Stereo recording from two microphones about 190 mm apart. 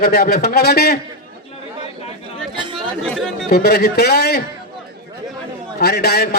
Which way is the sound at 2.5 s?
25° right (ahead or behind).